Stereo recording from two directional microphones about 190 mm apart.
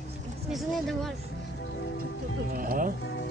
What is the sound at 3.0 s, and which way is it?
Speech, 65° left (ahead or behind).